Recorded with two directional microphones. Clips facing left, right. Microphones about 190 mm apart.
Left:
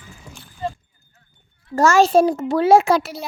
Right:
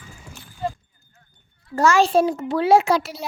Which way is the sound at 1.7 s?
45° left (ahead or behind).